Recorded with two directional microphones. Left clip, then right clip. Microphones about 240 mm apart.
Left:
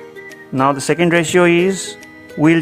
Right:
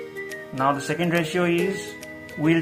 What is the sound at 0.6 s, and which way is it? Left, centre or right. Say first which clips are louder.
Speech: left 8 dB; left.